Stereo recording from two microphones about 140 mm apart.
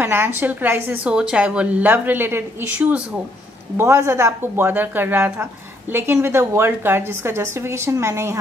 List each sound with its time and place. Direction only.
0.0 s a woman's voice: 15° right (ahead or behind)